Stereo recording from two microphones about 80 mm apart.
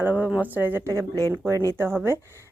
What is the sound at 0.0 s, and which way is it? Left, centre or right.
Speech, centre.